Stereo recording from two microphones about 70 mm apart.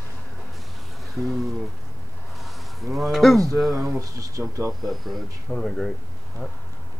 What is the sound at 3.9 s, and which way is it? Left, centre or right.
Speech, right.